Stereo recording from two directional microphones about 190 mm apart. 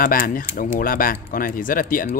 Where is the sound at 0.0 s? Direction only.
50° left (ahead or behind).